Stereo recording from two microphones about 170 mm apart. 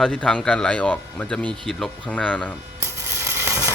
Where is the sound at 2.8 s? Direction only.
15° right (ahead or behind).